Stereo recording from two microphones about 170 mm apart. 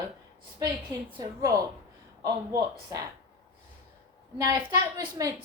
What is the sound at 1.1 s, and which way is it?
A woman's voice, 20° right (ahead or behind).